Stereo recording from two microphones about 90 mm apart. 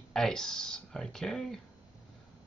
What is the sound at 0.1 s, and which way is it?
Speech, 5° left (ahead or behind).